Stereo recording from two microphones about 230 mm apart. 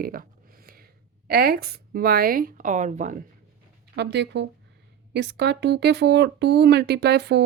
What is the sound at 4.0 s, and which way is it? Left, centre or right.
Speech, right.